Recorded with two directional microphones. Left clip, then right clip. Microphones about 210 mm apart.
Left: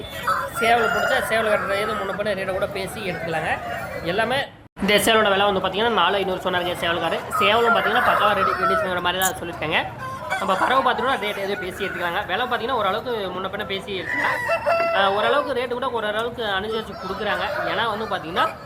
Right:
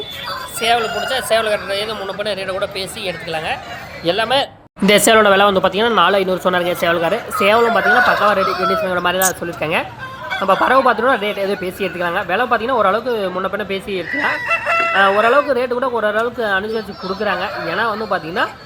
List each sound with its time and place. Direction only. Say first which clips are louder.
0.6 s speech: right 3 dB; 30° right (ahead or behind)